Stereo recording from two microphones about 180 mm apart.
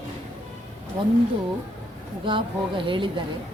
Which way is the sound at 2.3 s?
30° right (ahead or behind).